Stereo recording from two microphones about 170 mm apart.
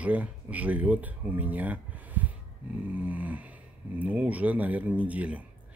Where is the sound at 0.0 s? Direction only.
10° right (ahead or behind).